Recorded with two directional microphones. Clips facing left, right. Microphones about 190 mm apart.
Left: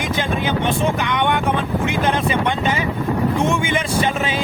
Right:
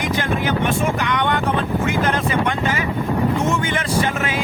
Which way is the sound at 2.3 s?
20° left (ahead or behind).